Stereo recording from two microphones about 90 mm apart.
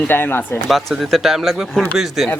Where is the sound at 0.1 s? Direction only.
25° left (ahead or behind).